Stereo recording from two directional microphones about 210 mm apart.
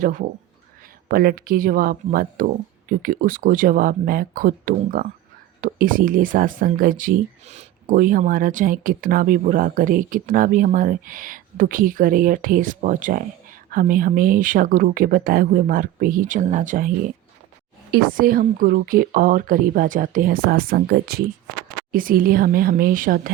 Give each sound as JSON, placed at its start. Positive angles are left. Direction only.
{"t": 0.0, "sound": "speech", "side_deg": -40}